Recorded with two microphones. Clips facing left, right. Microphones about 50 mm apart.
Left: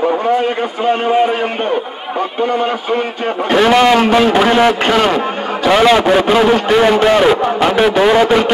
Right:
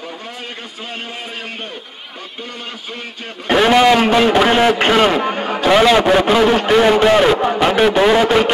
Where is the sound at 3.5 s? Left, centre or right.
Centre.